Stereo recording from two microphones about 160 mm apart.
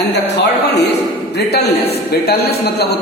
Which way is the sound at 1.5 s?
90° left.